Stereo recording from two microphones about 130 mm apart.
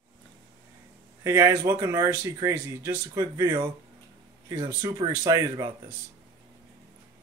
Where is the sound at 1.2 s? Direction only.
20° right (ahead or behind).